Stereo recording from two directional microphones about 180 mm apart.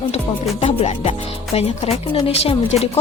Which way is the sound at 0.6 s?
35° left (ahead or behind).